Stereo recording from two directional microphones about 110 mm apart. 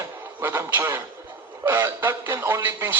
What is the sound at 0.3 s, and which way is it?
A man's voice, 15° right (ahead or behind).